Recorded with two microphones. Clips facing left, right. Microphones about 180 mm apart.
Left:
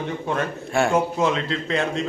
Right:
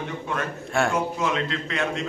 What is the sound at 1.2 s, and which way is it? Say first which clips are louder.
Speech: left 4 dB; 30° left (ahead or behind).